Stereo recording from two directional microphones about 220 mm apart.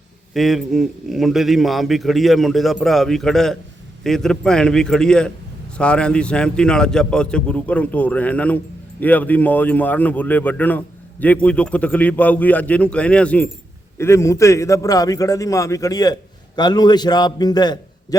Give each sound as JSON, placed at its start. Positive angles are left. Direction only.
{"t": 0.3, "sound": "a man's voice", "side_deg": 0}